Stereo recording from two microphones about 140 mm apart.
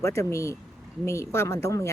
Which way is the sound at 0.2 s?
20° left (ahead or behind).